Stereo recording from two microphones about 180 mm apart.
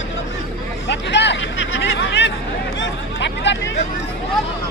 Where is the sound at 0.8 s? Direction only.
75° left (ahead or behind).